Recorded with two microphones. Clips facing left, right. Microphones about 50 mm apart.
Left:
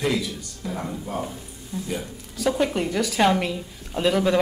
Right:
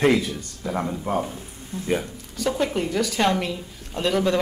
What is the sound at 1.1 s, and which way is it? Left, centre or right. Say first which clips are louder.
Speech: right 4 dB; right.